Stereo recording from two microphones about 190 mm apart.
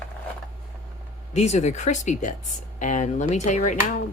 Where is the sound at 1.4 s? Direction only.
40° left (ahead or behind).